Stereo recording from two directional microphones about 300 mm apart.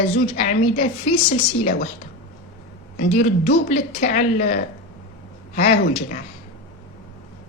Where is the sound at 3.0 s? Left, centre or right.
Left.